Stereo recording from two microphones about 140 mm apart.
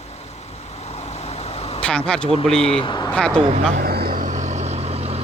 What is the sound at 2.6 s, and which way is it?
Speech, 40° left (ahead or behind).